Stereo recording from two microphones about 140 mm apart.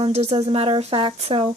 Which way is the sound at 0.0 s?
50° right (ahead or behind).